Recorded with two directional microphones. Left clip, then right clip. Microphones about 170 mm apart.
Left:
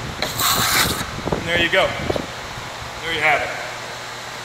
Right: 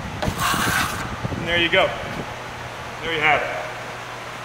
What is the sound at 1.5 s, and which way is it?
Speech, 20° left (ahead or behind).